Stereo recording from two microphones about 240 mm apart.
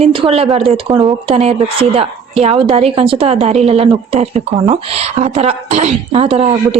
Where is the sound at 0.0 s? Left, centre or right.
Right.